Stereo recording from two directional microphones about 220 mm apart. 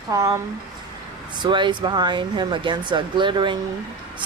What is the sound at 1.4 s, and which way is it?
Speech, 20° right (ahead or behind).